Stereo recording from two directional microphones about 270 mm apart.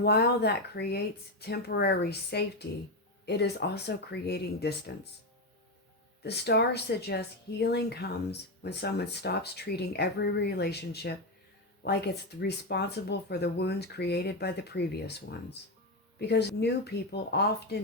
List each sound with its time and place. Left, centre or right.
0.0 s speech: left
6.2 s speech: left